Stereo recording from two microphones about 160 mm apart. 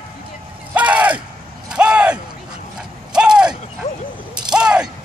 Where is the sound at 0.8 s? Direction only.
10° right (ahead or behind).